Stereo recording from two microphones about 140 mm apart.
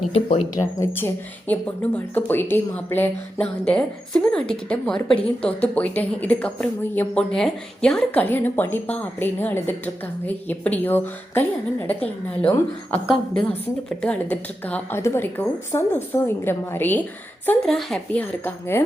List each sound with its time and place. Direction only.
0.1 s speech: 45° left (ahead or behind)
0.6 s a woman's voice: 15° left (ahead or behind)
14.0 s a woman's voice: 10° left (ahead or behind)